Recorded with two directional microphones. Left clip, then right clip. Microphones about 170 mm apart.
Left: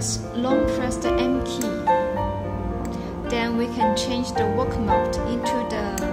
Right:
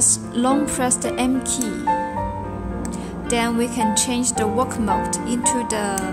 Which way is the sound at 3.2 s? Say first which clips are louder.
Right 3 dB; 30° right (ahead or behind).